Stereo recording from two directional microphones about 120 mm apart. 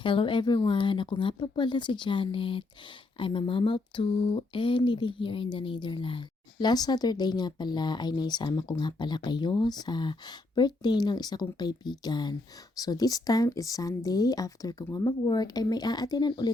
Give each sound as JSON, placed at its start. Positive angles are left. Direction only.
{"t": 0.0, "sound": "speech", "side_deg": 45}